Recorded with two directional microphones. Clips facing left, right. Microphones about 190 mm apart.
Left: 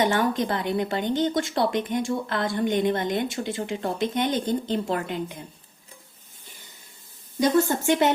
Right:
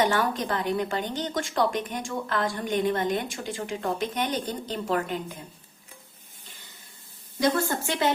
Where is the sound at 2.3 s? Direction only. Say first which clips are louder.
Left 2 dB; 20° left (ahead or behind).